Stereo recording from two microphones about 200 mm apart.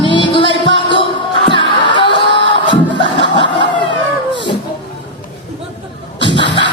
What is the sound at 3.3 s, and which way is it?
Snicker, 25° left (ahead or behind).